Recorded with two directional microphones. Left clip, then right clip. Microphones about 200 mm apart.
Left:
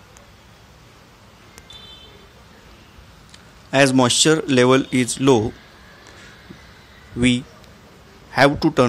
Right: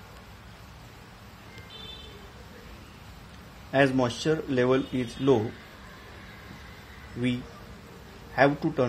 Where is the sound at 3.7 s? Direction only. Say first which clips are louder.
Left 9 dB; 30° left (ahead or behind).